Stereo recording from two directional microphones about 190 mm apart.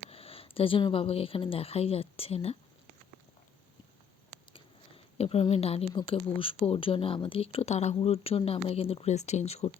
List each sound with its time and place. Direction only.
0.1 s speech: 30° left (ahead or behind)
5.1 s speech: 30° left (ahead or behind)